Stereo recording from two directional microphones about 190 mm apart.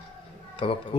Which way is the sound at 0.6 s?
30° left (ahead or behind).